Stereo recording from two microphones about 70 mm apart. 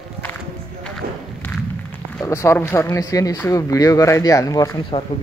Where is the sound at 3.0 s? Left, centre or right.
Left.